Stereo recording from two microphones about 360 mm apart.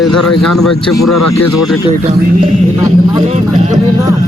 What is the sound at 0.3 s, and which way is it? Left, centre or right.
Speech, centre.